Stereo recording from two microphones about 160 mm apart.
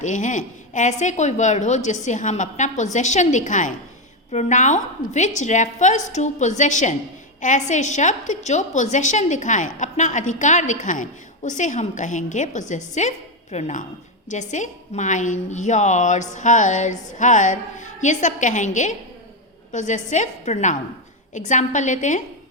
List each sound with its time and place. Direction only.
0.0 s a woman's voice: 50° left (ahead or behind)